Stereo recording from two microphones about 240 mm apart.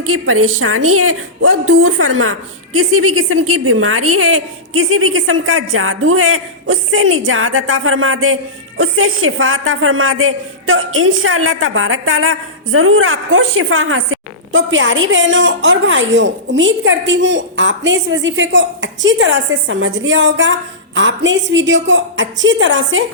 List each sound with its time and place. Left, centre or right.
0.0 s a woman's voice: right